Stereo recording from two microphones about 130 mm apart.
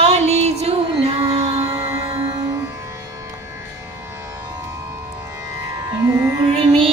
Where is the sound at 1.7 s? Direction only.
25° right (ahead or behind).